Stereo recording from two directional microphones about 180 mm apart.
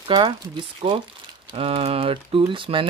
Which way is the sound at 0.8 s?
30° right (ahead or behind).